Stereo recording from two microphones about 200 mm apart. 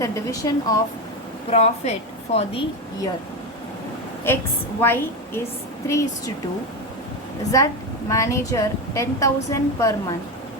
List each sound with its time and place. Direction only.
0.0 s a woman's voice: 15° left (ahead or behind)
1.5 s a woman's voice: 30° left (ahead or behind)
4.8 s a woman's voice: 10° left (ahead or behind)
7.5 s a woman's voice: 15° left (ahead or behind)